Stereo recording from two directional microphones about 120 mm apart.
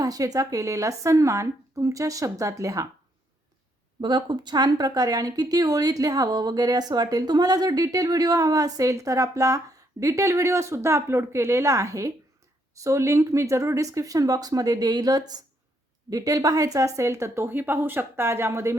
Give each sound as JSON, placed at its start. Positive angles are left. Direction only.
{"t": 0.0, "sound": "speech", "side_deg": -30}
{"t": 4.0, "sound": "speech", "side_deg": -40}